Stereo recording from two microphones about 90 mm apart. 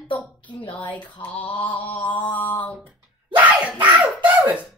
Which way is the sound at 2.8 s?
15° right (ahead or behind).